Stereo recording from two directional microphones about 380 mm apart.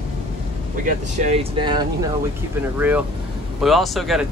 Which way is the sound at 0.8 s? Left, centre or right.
Centre.